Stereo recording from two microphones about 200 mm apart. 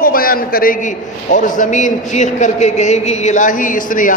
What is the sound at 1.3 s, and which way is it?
A man's voice, 40° left (ahead or behind).